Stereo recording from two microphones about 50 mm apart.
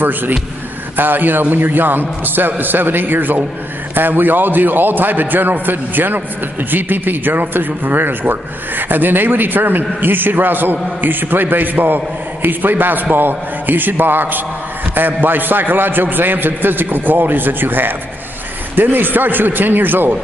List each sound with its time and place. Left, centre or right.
0.9 s speech: right